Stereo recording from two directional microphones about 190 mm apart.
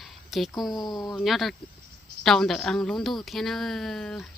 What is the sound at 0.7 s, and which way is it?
Speech, 20° left (ahead or behind).